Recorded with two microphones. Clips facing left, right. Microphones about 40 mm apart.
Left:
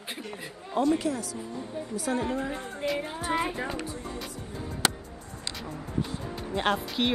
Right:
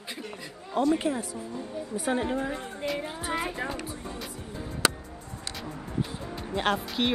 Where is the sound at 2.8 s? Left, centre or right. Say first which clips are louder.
Left 2 dB; centre.